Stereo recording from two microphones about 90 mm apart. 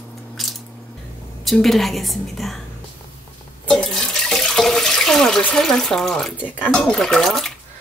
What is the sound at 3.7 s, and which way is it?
Water, 5° left (ahead or behind).